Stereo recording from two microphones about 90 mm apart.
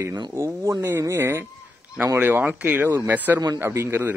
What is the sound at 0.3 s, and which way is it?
Speech, 30° right (ahead or behind).